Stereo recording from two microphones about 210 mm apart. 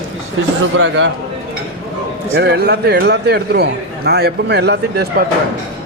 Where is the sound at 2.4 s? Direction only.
50° right (ahead or behind).